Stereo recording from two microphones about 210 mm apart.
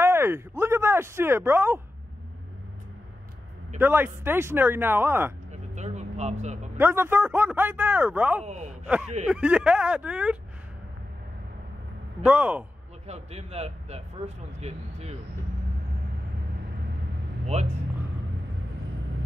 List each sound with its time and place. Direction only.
0.0 s speech: 10° right (ahead or behind)
3.7 s speech: 10° right (ahead or behind)
5.5 s vehicle: 35° right (ahead or behind)
6.4 s speech: 35° right (ahead or behind)
6.8 s speech: 10° right (ahead or behind)
8.5 s speech: 30° right (ahead or behind)
8.8 s speech: 5° right (ahead or behind)
12.2 s speech: 5° right (ahead or behind)
13.0 s speech: 30° right (ahead or behind)
17.5 s speech: 30° right (ahead or behind)